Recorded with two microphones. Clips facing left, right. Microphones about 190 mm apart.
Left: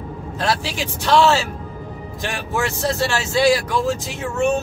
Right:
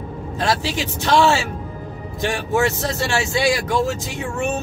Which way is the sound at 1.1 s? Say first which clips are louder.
Left 1 dB; 15° right (ahead or behind).